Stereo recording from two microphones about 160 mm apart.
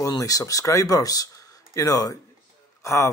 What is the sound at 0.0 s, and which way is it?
Speech, 20° left (ahead or behind).